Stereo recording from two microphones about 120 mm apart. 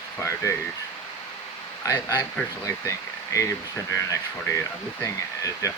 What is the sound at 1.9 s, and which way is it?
Speech, 25° left (ahead or behind).